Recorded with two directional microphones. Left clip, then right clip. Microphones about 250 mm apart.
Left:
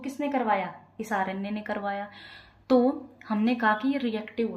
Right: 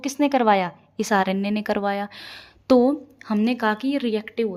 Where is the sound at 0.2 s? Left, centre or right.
Right.